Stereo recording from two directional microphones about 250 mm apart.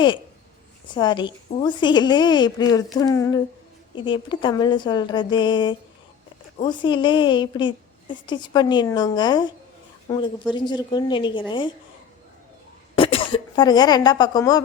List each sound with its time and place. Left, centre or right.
0.9 s a woman's voice: centre
13.0 s speech: left